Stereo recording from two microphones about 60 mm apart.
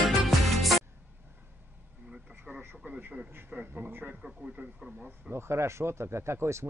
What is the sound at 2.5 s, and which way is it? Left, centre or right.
Radio, right.